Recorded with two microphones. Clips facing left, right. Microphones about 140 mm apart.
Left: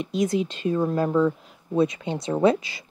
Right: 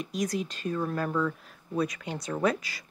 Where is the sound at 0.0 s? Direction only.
25° left (ahead or behind).